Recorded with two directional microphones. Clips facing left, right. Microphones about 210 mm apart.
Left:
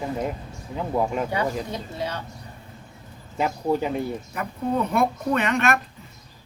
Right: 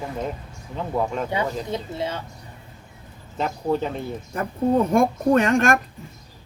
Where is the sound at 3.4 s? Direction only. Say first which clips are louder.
Even; 10° left (ahead or behind).